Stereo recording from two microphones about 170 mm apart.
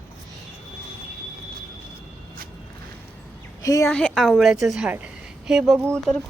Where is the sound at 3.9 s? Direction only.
5° left (ahead or behind).